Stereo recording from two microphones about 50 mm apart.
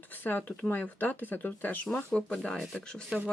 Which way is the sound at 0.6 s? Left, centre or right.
Left.